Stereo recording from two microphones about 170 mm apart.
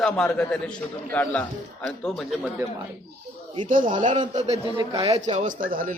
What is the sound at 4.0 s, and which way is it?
Speech, 45° right (ahead or behind).